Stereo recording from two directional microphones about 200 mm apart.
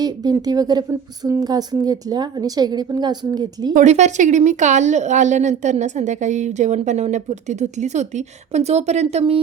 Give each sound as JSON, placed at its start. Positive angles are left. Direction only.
{"t": 0.0, "sound": "a woman's voice", "side_deg": -20}
{"t": 3.8, "sound": "a woman's voice", "side_deg": -35}